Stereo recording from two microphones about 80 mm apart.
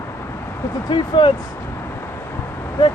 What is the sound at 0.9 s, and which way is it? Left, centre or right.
Speech, left.